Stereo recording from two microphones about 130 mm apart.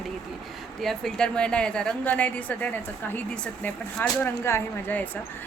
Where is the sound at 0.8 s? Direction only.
Centre (ahead or behind).